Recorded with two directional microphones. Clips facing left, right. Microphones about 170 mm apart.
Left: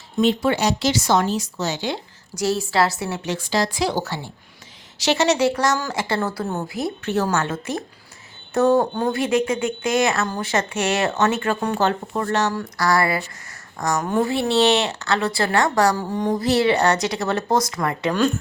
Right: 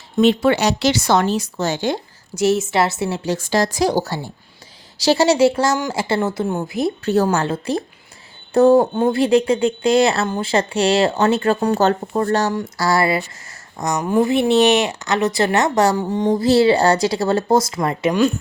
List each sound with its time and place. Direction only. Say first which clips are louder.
0.2 s speech: right 4 dB; 75° right (ahead or behind); by 2.0 s 50° right (ahead or behind)
2.3 s speech: right 4 dB; 25° right (ahead or behind)
3.3 s a woman's voice: right 3 dB; 45° right (ahead or behind); by 18.1 s 25° right (ahead or behind)
18.1 s a woman's voice: right 3 dB; 10° right (ahead or behind)